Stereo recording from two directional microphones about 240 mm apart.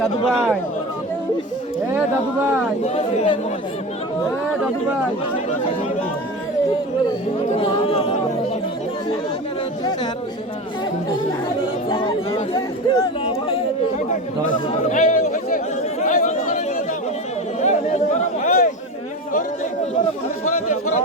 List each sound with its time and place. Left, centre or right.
0.0 s speech: centre
1.9 s speech: centre
2.8 s speech: left
7.6 s speech: left
11.9 s speech: left
14.7 s chatter: left
17.6 s chatter: left